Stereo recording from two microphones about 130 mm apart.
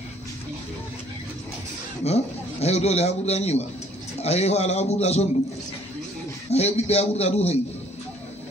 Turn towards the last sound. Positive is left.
turn(degrees=55)  # may be behind; listen again after turning